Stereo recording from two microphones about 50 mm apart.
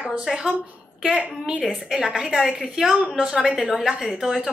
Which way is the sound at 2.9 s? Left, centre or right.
Centre.